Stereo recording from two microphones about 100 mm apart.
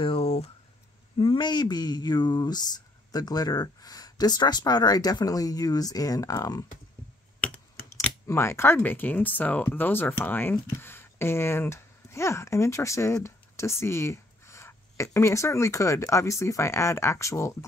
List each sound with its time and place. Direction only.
0.0 s a sound: 80° left
1.1 s speech: 60° left (ahead or behind); by 6.6 s 35° left (ahead or behind)
7.3 s computer keyboard: 10° left (ahead or behind)
8.3 s speech: 25° left (ahead or behind)